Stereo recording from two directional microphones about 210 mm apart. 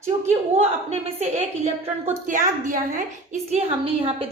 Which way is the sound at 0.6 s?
30° right (ahead or behind).